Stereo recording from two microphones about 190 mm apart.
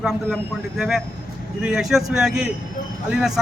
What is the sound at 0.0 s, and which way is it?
Speech, centre (ahead or behind).